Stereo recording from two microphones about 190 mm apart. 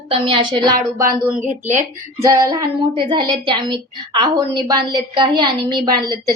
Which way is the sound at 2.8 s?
25° right (ahead or behind).